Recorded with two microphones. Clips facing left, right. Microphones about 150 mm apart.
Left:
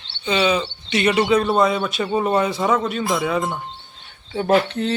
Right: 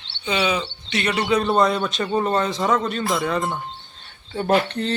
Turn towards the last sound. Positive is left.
turn(degrees=5)  # may be behind; listen again after turning